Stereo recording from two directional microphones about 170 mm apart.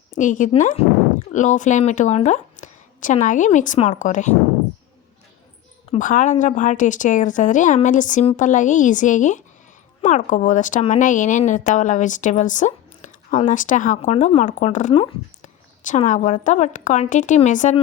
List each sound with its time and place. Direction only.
0.1 s a woman's voice: 50° left (ahead or behind)
6.0 s a woman's voice: 50° left (ahead or behind)